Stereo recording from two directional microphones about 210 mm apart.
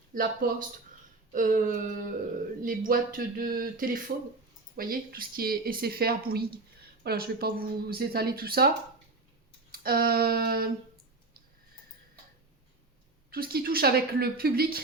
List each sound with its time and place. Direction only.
0.1 s speech: 40° right (ahead or behind)
9.7 s speech: 45° right (ahead or behind)
13.3 s speech: 45° right (ahead or behind)